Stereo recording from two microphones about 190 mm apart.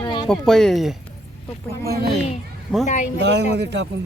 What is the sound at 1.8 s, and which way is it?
Speech, 55° right (ahead or behind).